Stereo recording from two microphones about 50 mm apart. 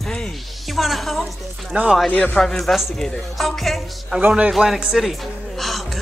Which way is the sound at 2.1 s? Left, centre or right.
Left.